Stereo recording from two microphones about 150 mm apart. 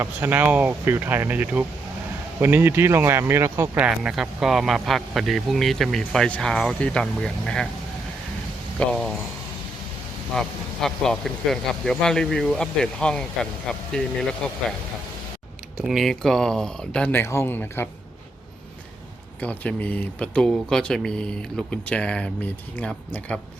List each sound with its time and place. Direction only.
0.0 s speech: 15° right (ahead or behind)
3.8 s a man's voice: 5° right (ahead or behind)
8.8 s speech: 5° left (ahead or behind)
10.3 s a man's voice: 5° left (ahead or behind)
15.8 s a man's voice: centre (ahead or behind)
19.4 s speech: 10° left (ahead or behind)